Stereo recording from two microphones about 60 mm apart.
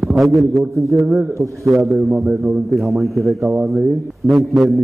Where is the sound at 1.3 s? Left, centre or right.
Right.